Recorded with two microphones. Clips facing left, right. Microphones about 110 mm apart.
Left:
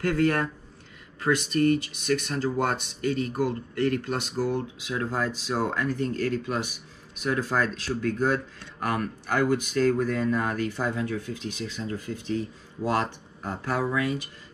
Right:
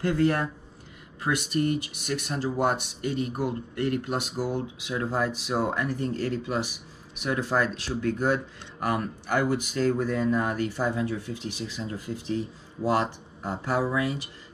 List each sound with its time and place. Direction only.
0.1 s speech: 15° right (ahead or behind)